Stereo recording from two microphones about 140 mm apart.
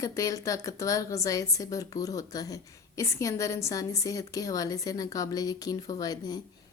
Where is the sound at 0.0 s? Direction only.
25° left (ahead or behind).